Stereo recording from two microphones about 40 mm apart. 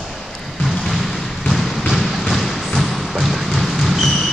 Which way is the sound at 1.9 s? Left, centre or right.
Centre.